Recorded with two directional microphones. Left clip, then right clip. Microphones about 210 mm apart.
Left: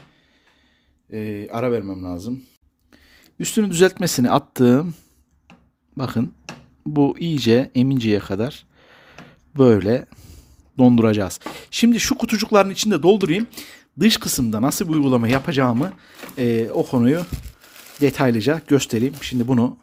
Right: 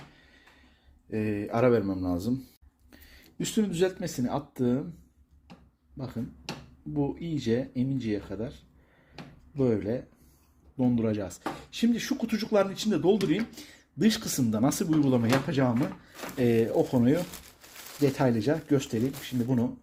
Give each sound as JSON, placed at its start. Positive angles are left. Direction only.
{"t": 1.1, "sound": "speech", "side_deg": 15}
{"t": 2.9, "sound": "a sound", "side_deg": 20}
{"t": 3.3, "sound": "speech", "side_deg": 35}
{"t": 6.0, "sound": "speech", "side_deg": 50}
{"t": 9.6, "sound": "speech", "side_deg": 50}
{"t": 16.3, "sound": "speech", "side_deg": 25}
{"t": 16.9, "sound": "speech", "side_deg": 35}